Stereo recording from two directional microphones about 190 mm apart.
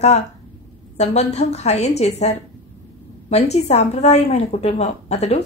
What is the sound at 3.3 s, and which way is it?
Speech, 35° left (ahead or behind).